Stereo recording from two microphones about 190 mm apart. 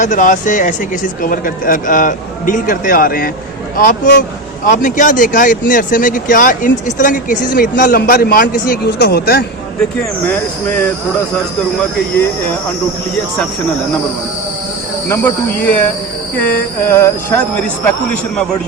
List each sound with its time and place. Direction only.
0.0 s speech: 45° left (ahead or behind)
10.2 s speech: 10° left (ahead or behind)
15.1 s speech: 10° left (ahead or behind)
16.9 s speech: 15° left (ahead or behind)